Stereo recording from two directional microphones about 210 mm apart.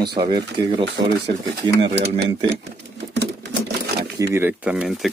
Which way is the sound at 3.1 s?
55° right (ahead or behind).